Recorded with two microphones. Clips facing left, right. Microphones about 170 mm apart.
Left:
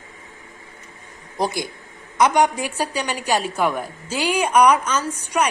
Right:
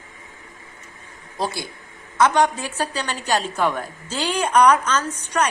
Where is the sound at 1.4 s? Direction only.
15° left (ahead or behind).